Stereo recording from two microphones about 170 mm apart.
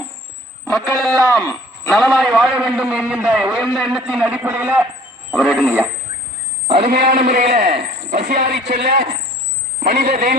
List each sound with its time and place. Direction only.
0.7 s a man's voice: centre (ahead or behind)
6.7 s a sound: 35° right (ahead or behind)
7.3 s a man's voice: 40° right (ahead or behind)
8.8 s a man's voice: 80° right
10.1 s speech: 45° right (ahead or behind)